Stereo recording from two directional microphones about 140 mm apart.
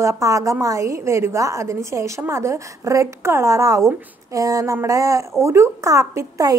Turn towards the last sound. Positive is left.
turn(degrees=-25)  # may be behind; listen again after turning